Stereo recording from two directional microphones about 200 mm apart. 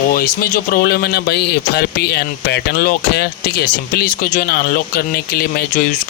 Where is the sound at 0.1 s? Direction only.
45° left (ahead or behind).